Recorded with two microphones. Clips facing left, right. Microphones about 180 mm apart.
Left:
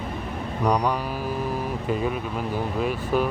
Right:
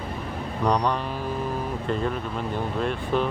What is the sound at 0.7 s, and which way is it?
Speech, 10° left (ahead or behind).